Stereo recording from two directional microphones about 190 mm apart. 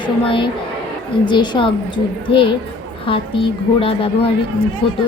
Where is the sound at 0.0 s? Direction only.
25° left (ahead or behind).